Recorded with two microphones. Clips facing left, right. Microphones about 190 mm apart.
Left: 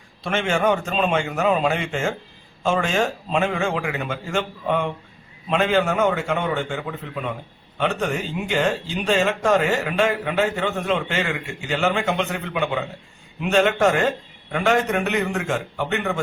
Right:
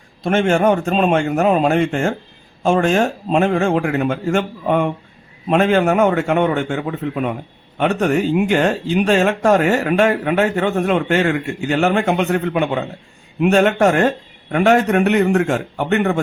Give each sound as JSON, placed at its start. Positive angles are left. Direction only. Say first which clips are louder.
{"t": 0.3, "sound": "a man's voice", "louder": "right 6 dB", "side_deg": -50}